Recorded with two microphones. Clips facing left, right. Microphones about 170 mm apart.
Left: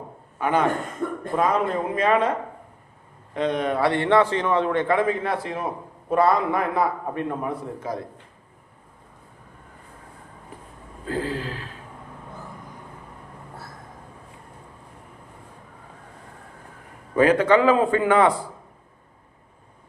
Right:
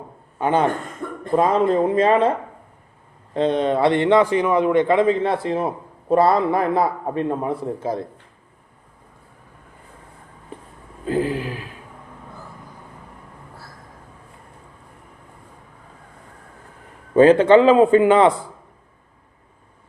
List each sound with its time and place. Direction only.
0.3 s a man's voice: 30° right (ahead or behind)
3.3 s a man's voice: 30° right (ahead or behind)
11.0 s a sound: 15° right (ahead or behind)
17.2 s a man's voice: 25° right (ahead or behind)